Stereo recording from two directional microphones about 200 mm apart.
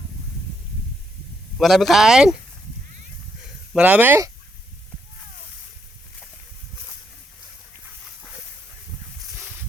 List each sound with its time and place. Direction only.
1.5 s speech: centre (ahead or behind)
3.7 s speech: 5° right (ahead or behind)